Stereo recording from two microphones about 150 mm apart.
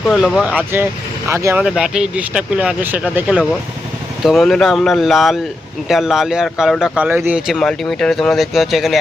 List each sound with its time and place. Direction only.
0.0 s a man's voice: centre (ahead or behind); by 1.6 s 20° right (ahead or behind)
1.6 s a man's voice: 5° right (ahead or behind)
7.5 s a man's voice: 5° left (ahead or behind)